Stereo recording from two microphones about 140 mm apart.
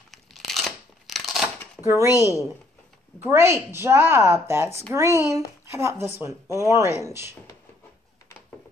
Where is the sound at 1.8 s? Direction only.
20° right (ahead or behind).